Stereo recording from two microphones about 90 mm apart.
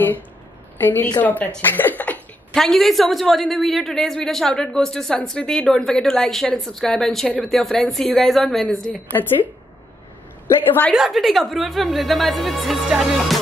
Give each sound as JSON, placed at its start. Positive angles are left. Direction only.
{"t": 0.7, "sound": "a woman's voice", "side_deg": 20}
{"t": 1.6, "sound": "a sound", "side_deg": 20}
{"t": 2.5, "sound": "a woman's voice", "side_deg": 5}
{"t": 10.9, "sound": "a woman's voice", "side_deg": 0}